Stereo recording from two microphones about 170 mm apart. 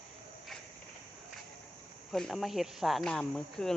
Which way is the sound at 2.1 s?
Centre (ahead or behind).